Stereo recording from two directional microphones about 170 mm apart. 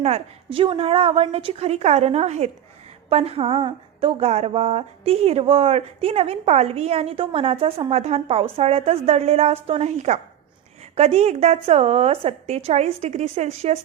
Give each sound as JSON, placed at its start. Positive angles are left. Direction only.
{"t": 0.0, "sound": "a woman's voice", "side_deg": -35}